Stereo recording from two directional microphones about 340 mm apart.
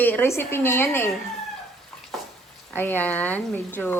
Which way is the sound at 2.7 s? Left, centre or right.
Centre.